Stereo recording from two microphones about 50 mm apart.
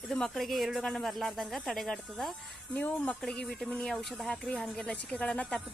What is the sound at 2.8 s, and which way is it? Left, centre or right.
Speech, left.